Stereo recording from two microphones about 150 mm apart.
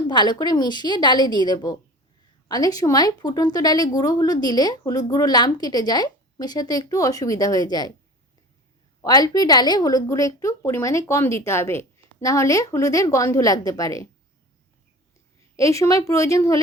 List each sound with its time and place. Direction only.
0.1 s a woman's voice: 30° left (ahead or behind)
9.0 s a woman's voice: 25° left (ahead or behind)
15.5 s a woman's voice: 20° left (ahead or behind)